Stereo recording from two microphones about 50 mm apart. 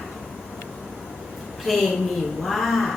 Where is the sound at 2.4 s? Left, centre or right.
Centre.